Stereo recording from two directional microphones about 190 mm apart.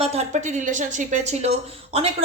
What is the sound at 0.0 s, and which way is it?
Speech, 35° right (ahead or behind).